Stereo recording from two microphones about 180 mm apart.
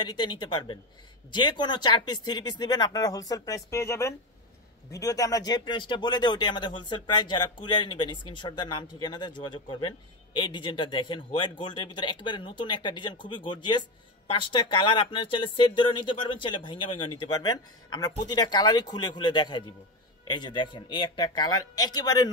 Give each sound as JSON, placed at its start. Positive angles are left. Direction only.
{"t": 0.0, "sound": "speech", "side_deg": 25}